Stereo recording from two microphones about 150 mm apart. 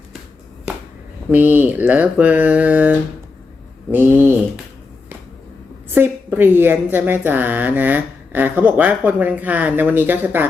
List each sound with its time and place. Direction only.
0.7 s a sound: 5° right (ahead or behind)
1.3 s a woman's voice: 10° right (ahead or behind)
3.9 s a woman's voice: 15° right (ahead or behind)
5.9 s a woman's voice: 15° right (ahead or behind)